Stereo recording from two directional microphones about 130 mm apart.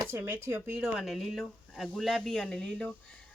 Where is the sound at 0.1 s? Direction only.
15° right (ahead or behind).